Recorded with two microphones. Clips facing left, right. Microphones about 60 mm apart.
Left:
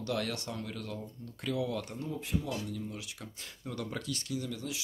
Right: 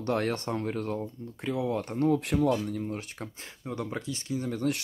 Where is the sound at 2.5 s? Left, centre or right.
Right.